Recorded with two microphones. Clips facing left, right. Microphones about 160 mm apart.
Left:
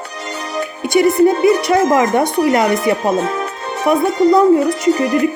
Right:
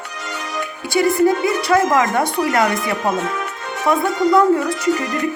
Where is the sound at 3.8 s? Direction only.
20° left (ahead or behind).